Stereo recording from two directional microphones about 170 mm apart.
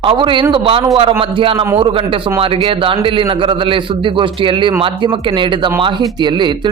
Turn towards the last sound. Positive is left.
turn(degrees=-25)  # may be behind; listen again after turning